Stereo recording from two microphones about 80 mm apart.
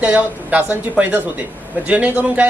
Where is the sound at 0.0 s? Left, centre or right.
Centre.